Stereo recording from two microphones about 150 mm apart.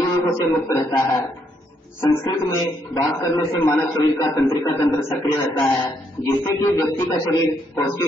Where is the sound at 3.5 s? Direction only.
15° left (ahead or behind).